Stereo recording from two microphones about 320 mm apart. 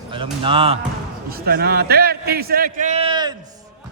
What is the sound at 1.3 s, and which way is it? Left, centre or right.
A man's voice, right.